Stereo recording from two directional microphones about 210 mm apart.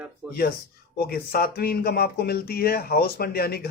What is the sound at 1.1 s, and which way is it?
Speech, 45° left (ahead or behind).